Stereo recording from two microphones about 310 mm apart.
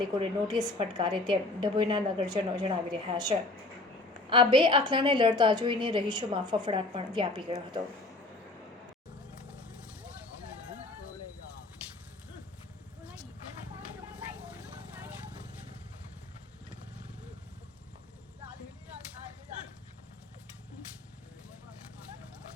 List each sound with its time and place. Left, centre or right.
0.2 s a woman's voice: centre
4.3 s a woman's voice: centre
14.2 s vehicle: centre